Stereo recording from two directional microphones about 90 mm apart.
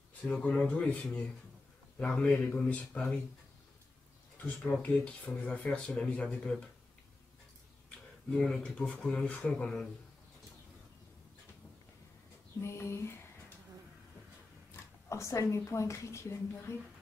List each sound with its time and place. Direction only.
0.2 s speech: 15° left (ahead or behind)
4.8 s speech: 15° left (ahead or behind)
8.5 s speech: 5° left (ahead or behind)
12.6 s a sound: 30° left (ahead or behind)
15.0 s a woman's voice: 35° left (ahead or behind)